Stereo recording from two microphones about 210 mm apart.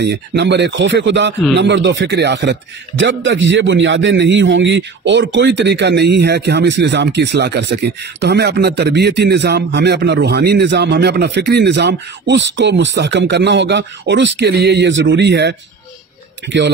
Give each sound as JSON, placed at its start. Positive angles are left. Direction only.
{"t": 0.0, "sound": "a man's voice", "side_deg": -55}